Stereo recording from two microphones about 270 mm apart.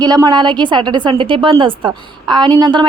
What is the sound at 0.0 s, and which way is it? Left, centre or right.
A woman's voice, centre.